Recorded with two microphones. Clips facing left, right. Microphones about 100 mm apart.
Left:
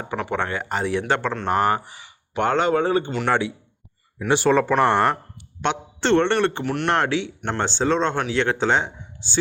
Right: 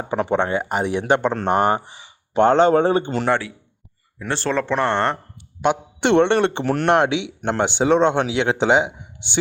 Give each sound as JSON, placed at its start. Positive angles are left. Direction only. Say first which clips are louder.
{"t": 0.0, "sound": "speech", "louder": "right 5 dB", "side_deg": -25}
{"t": 4.3, "sound": "speech", "louder": "left 4 dB", "side_deg": 10}
{"t": 5.6, "sound": "speech", "louder": "right 3 dB", "side_deg": -15}